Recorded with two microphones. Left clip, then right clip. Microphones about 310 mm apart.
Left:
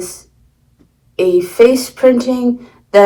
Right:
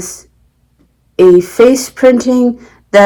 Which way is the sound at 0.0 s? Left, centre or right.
Right.